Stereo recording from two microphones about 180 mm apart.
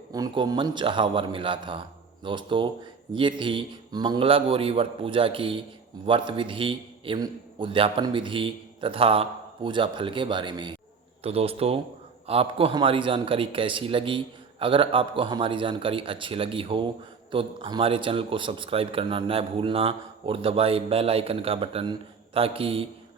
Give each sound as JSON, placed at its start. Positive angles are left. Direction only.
{"t": 0.1, "sound": "a man's voice", "side_deg": -20}